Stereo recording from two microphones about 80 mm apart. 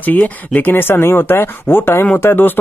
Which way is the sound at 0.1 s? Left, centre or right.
Left.